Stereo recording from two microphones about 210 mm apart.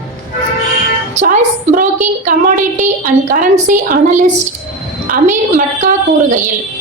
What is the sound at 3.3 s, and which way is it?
A woman's voice, 40° right (ahead or behind).